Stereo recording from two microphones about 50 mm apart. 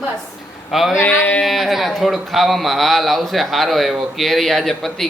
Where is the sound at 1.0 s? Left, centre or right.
Left.